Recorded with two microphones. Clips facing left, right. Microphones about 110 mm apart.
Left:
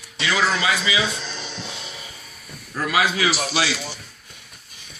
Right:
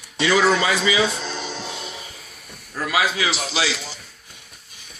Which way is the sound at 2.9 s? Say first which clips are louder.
Left 1 dB; 20° right (ahead or behind).